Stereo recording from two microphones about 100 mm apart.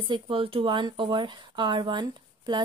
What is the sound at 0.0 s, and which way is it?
Speech, 60° right (ahead or behind).